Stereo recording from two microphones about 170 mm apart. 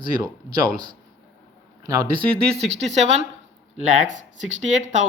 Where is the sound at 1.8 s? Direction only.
25° right (ahead or behind).